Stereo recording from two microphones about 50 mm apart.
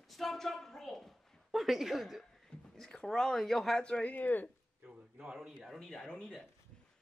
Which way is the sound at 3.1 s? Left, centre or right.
Centre.